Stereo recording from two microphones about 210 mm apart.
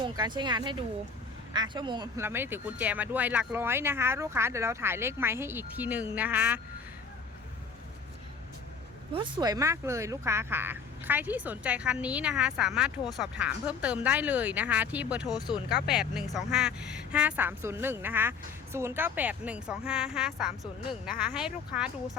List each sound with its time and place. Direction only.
0.0 s speech: 20° right (ahead or behind)
9.1 s speech: 20° right (ahead or behind)
15.3 s speech: 20° left (ahead or behind)
15.9 s speech: centre (ahead or behind)